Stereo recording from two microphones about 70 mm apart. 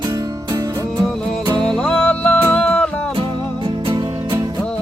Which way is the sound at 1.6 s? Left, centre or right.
Centre.